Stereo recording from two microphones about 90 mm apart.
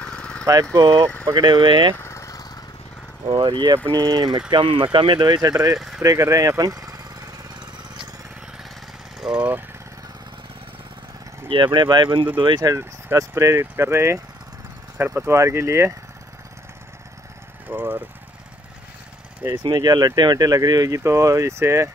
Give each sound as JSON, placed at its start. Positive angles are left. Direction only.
{"t": 0.0, "sound": "a sound", "side_deg": 10}
{"t": 0.7, "sound": "speech", "side_deg": -45}
{"t": 1.3, "sound": "speech", "side_deg": -55}
{"t": 2.0, "sound": "vehicle", "side_deg": 30}
{"t": 3.3, "sound": "speech", "side_deg": -60}
{"t": 3.9, "sound": "speech", "side_deg": -45}
{"t": 4.5, "sound": "speech", "side_deg": -70}
{"t": 5.8, "sound": "speech", "side_deg": -5}
{"t": 6.0, "sound": "speech", "side_deg": -35}
{"t": 9.2, "sound": "speech", "side_deg": -10}
{"t": 11.4, "sound": "speech", "side_deg": -60}
{"t": 12.6, "sound": "speech", "side_deg": -30}
{"t": 17.6, "sound": "speech", "side_deg": -25}
{"t": 19.6, "sound": "speech", "side_deg": -55}